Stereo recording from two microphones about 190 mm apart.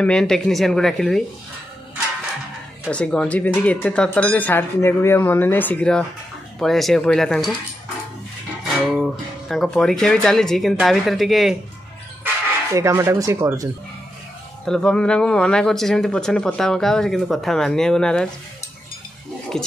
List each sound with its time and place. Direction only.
0.0 s speech: 5° left (ahead or behind)
2.9 s speech: 5° left (ahead or behind)
8.6 s speech: centre (ahead or behind)
12.7 s speech: 15° right (ahead or behind)
14.6 s speech: 5° left (ahead or behind)
19.5 s speech: 5° left (ahead or behind)